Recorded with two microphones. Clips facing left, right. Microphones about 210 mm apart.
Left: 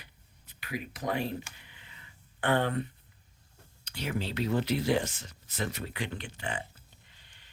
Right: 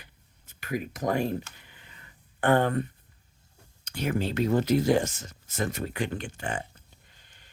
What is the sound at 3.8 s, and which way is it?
Speech, 50° right (ahead or behind).